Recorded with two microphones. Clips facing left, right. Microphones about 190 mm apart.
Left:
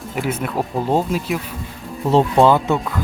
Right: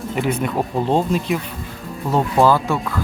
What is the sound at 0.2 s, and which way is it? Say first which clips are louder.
Speech: right 1 dB; 5° left (ahead or behind).